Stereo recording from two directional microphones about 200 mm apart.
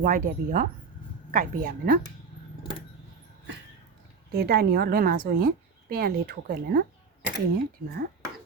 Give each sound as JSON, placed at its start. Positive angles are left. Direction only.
{"t": 0.0, "sound": "a woman's voice", "side_deg": -45}
{"t": 4.3, "sound": "a woman's voice", "side_deg": -50}